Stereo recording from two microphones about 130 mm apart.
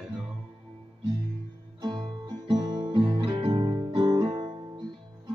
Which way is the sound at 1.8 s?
35° right (ahead or behind).